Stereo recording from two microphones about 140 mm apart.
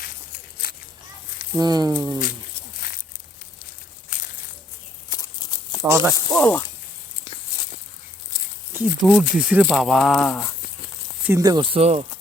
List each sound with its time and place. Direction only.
1.5 s speech: 25° right (ahead or behind)
4.1 s crushing: 65° left (ahead or behind)
5.0 s a sound: 30° left (ahead or behind)
5.8 s speech: 20° right (ahead or behind)
6.4 s speech: 15° left (ahead or behind)
8.7 s speech: 10° right (ahead or behind)
9.6 s speech: centre (ahead or behind)
11.3 s speech: 25° right (ahead or behind); by 12.0 s 45° right (ahead or behind)